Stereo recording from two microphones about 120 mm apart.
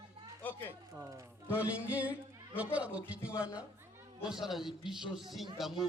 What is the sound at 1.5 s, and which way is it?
Music, 10° right (ahead or behind).